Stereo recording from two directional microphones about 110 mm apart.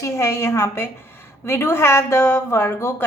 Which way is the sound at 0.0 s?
25° left (ahead or behind).